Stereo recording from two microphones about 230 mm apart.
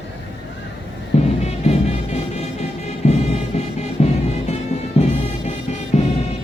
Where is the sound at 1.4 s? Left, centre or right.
Left.